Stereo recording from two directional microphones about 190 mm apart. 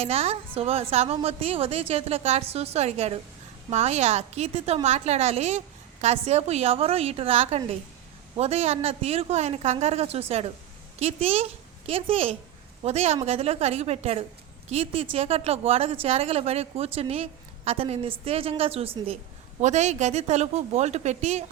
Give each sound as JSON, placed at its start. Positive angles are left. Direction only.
{"t": 0.0, "sound": "a woman's voice", "side_deg": -30}